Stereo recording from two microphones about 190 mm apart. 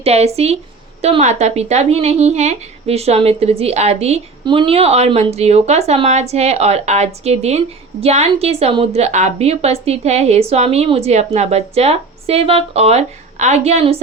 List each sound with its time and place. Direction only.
0.0 s a woman's voice: 35° right (ahead or behind)